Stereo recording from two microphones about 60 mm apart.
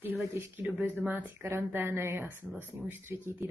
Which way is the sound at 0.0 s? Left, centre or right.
Right.